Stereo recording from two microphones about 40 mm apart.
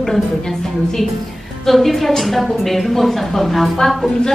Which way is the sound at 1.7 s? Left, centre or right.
Centre.